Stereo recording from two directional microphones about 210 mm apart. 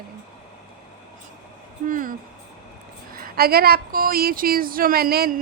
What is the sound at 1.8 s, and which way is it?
A woman's voice, 40° right (ahead or behind).